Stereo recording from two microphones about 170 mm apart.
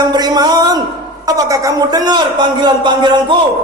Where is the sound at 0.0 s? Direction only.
25° right (ahead or behind).